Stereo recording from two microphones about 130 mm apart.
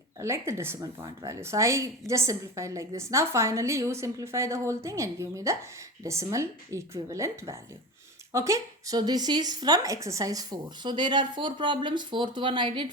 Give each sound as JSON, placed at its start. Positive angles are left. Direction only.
{"t": 0.2, "sound": "a woman's voice", "side_deg": -20}